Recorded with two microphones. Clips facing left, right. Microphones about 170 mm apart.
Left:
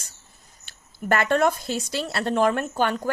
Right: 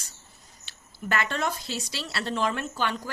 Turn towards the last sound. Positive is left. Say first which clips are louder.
# left 6 dB
turn(degrees=50)  # may be behind; listen again after turning